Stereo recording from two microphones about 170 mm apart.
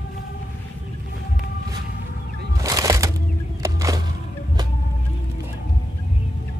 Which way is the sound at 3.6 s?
20° right (ahead or behind).